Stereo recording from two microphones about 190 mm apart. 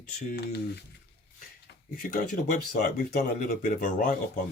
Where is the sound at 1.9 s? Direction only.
50° left (ahead or behind).